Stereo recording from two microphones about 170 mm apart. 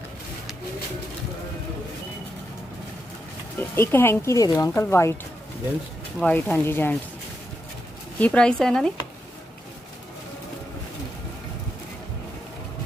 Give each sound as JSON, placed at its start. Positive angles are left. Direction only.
{"t": 3.6, "sound": "speech", "side_deg": 15}
{"t": 6.1, "sound": "speech", "side_deg": 10}
{"t": 8.2, "sound": "speech", "side_deg": 5}